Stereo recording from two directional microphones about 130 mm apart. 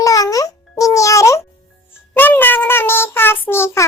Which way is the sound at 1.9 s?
15° left (ahead or behind).